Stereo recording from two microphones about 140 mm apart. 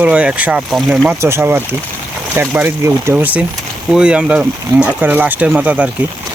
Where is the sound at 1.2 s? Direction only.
20° right (ahead or behind).